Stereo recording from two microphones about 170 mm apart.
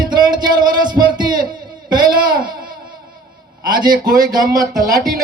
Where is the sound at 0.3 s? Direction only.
25° right (ahead or behind).